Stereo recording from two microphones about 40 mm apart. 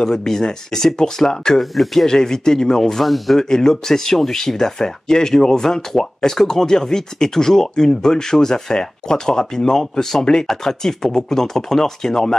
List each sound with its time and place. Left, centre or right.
0.0 s speech: centre
1.6 s speech: centre
2.0 s speech: centre
2.8 s speech: centre
3.3 s speech: centre